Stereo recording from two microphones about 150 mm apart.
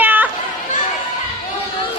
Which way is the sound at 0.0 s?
10° right (ahead or behind).